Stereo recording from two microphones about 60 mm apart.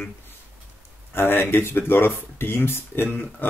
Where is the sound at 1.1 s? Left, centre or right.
Left.